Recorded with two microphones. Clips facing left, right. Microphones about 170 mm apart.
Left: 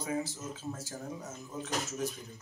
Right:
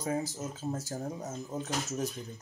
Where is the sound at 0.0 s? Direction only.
40° right (ahead or behind).